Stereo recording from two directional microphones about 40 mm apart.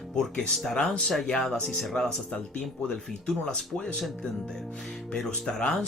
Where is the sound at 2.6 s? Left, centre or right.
Centre.